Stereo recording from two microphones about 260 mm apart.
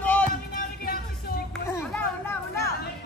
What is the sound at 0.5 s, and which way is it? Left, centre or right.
Music, left.